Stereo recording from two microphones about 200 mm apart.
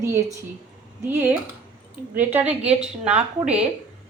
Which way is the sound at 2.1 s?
10° right (ahead or behind).